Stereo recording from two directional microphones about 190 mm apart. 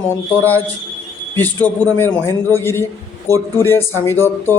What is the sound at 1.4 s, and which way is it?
A man's voice, 10° left (ahead or behind).